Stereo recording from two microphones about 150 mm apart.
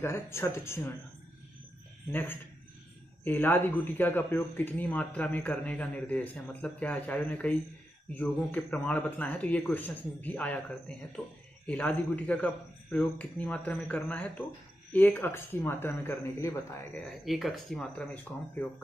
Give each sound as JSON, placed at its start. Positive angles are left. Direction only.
{"t": 0.0, "sound": "speech", "side_deg": 15}
{"t": 3.3, "sound": "speech", "side_deg": 10}
{"t": 17.0, "sound": "speech", "side_deg": 0}